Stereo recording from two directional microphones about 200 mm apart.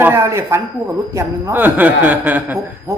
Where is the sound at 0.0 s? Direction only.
10° right (ahead or behind).